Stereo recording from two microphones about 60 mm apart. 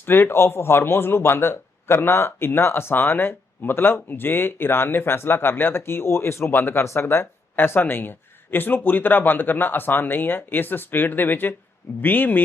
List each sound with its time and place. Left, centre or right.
0.0 s speech: left